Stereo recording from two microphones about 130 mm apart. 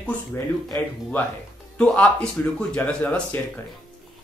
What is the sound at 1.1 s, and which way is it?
Speech, 15° left (ahead or behind).